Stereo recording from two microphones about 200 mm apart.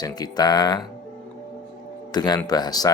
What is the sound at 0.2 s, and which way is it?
Speech, 20° left (ahead or behind).